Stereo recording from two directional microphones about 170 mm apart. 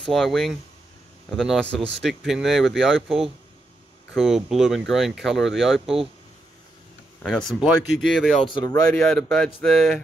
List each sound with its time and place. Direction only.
0.1 s speech: centre (ahead or behind)
7.2 s speech: centre (ahead or behind)
8.5 s speech: 25° left (ahead or behind)
9.0 s speech: centre (ahead or behind)